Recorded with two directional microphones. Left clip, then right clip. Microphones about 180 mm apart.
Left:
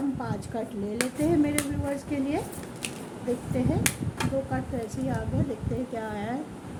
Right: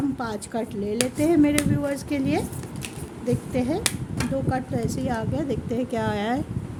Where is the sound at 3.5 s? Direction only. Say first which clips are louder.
Right 1 dB; 60° right (ahead or behind).